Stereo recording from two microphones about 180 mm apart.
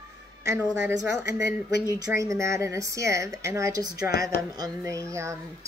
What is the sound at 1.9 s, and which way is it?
Speech, 15° right (ahead or behind).